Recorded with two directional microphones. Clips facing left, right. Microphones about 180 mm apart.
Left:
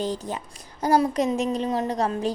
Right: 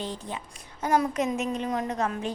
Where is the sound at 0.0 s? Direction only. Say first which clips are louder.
Left 6 dB; 40° left (ahead or behind).